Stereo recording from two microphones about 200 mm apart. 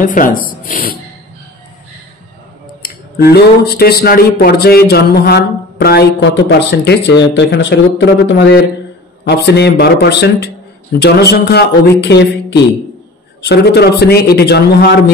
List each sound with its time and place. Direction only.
0.0 s speech: 40° left (ahead or behind)
2.8 s speech: 50° left (ahead or behind)